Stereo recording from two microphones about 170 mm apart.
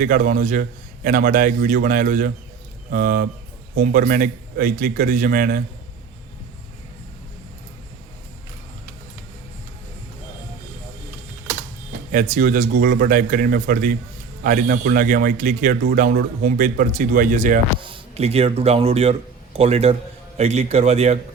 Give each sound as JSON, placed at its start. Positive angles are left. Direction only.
{"t": 0.0, "sound": "a man's voice", "side_deg": -50}
{"t": 12.1, "sound": "a man's voice", "side_deg": -50}
{"t": 17.7, "sound": "a man's voice", "side_deg": -30}